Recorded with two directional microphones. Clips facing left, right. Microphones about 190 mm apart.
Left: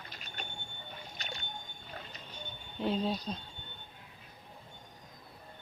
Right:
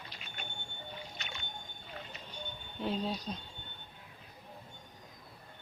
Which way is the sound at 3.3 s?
Centre (ahead or behind).